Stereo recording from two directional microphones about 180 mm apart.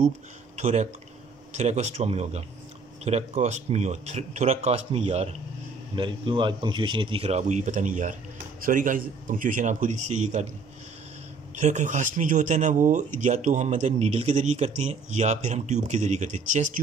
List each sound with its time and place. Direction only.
0.6 s a man's voice: 40° right (ahead or behind)
11.6 s a man's voice: 40° right (ahead or behind)